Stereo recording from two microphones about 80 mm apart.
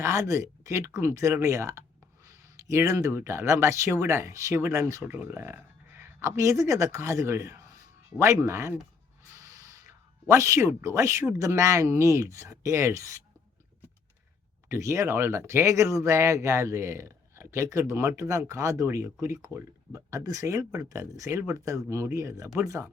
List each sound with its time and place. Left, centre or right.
0.0 s speech: right
2.2 s a sound: right
3.2 s speech: right
5.0 s a sound: right
6.3 s speech: right
9.3 s snort: right
10.2 s speech: right
10.7 s speech: right
14.7 s speech: right